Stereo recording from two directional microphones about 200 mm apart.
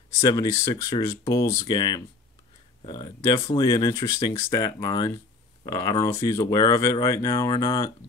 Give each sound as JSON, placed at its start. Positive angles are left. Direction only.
{"t": 0.2, "sound": "speech", "side_deg": 20}